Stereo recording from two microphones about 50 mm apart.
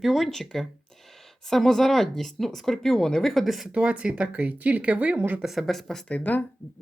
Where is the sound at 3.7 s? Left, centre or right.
Right.